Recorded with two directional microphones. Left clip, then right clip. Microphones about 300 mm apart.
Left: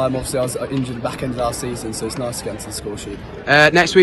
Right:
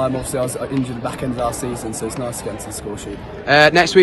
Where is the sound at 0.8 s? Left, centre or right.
Right.